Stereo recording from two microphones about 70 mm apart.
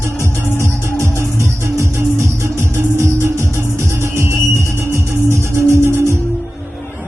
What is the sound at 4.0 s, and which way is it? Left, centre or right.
Music, right.